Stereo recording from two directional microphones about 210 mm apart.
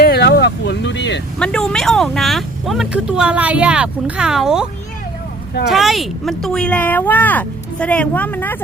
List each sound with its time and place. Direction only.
0.0 s vehicle: 50° left (ahead or behind)
1.4 s speech: 5° left (ahead or behind)
5.7 s speech: centre (ahead or behind)